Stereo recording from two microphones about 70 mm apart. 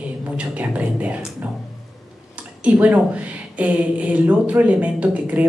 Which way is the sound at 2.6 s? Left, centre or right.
Centre.